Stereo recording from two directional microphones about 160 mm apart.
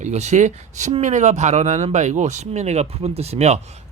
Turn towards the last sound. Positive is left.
turn(degrees=-45)  # may be behind; listen again after turning